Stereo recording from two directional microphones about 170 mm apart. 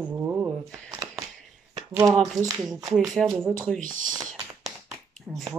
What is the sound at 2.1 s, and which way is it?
Speech, centre (ahead or behind).